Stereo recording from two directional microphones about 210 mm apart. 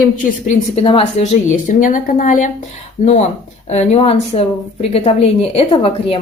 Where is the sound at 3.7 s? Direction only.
30° left (ahead or behind).